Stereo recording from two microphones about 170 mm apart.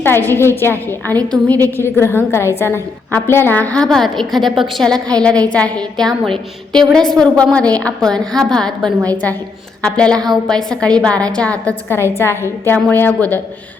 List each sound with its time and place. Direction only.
0.0 s a woman's voice: 15° left (ahead or behind)
4.9 s a woman's voice: 20° right (ahead or behind)
5.2 s a woman's voice: 5° left (ahead or behind)